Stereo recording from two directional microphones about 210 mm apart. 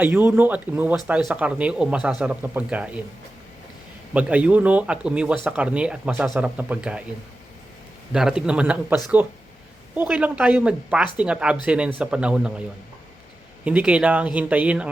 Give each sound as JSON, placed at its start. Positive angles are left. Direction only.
{"t": 0.0, "sound": "speech", "side_deg": -10}
{"t": 4.1, "sound": "speech", "side_deg": -5}
{"t": 8.1, "sound": "speech", "side_deg": -5}
{"t": 13.7, "sound": "speech", "side_deg": -5}